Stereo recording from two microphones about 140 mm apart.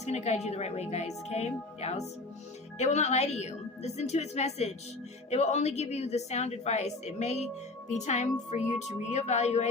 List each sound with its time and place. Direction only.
0.0 s a woman's voice: 50° left (ahead or behind)